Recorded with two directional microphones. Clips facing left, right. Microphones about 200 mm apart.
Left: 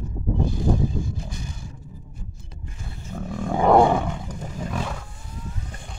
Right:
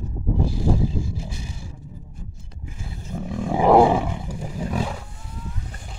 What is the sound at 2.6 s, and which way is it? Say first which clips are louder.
Roar: right 3 dB; 5° right (ahead or behind).